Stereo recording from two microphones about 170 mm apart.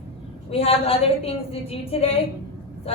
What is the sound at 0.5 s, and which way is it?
A woman's voice, 35° left (ahead or behind).